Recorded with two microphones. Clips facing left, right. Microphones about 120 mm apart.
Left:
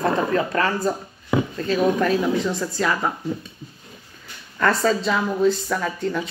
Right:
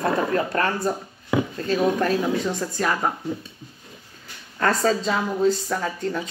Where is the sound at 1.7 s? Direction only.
40° right (ahead or behind).